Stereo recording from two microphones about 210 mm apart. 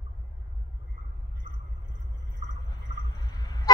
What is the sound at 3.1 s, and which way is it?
Vehicle, 20° left (ahead or behind).